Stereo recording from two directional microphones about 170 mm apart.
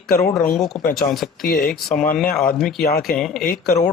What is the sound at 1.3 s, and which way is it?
Speech, 55° left (ahead or behind).